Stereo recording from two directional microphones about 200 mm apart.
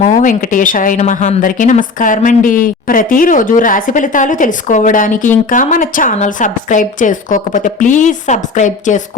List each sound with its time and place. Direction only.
0.0 s a woman's voice: 40° left (ahead or behind)